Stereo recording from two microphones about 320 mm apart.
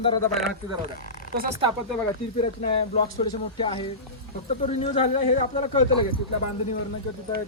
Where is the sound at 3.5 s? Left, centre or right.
Centre.